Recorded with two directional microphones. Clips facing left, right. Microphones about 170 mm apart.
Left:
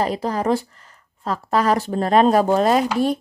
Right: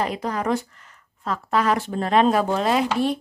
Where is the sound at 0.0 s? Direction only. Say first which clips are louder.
Left 3 dB; 35° left (ahead or behind).